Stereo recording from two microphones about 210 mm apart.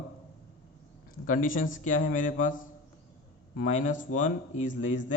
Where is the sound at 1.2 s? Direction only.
40° left (ahead or behind).